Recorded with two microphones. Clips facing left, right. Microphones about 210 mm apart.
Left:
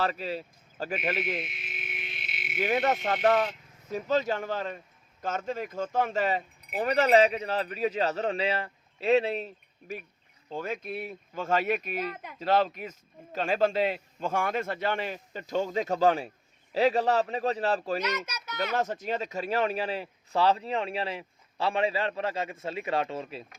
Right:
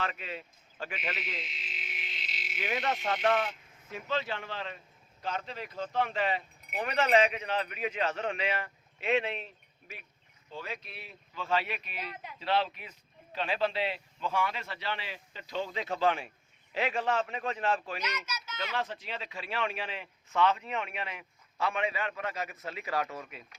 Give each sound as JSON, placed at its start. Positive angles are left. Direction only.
{"t": 0.0, "sound": "speech", "side_deg": 35}
{"t": 2.8, "sound": "speech", "side_deg": 40}
{"t": 18.3, "sound": "a sound", "side_deg": 60}
{"t": 18.5, "sound": "speech", "side_deg": 45}